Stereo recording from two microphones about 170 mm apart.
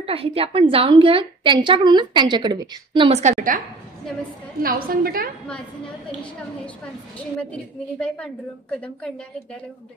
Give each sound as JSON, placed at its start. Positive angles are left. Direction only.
{"t": 0.0, "sound": "a woman's voice", "side_deg": -35}
{"t": 8.0, "sound": "a woman's voice", "side_deg": 5}